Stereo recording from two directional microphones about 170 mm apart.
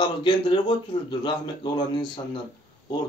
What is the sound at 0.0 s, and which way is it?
Speech, 25° left (ahead or behind).